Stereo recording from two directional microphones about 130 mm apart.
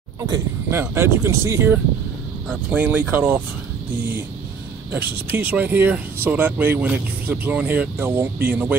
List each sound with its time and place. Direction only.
0.2 s speech: 20° right (ahead or behind)
4.9 s speech: 15° right (ahead or behind)